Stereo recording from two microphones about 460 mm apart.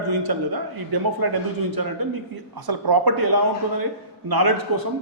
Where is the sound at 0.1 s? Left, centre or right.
Right.